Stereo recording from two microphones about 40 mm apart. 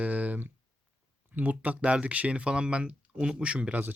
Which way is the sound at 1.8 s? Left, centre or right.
Right.